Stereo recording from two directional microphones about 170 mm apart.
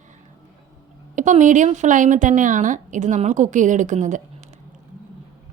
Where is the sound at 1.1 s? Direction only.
45° right (ahead or behind).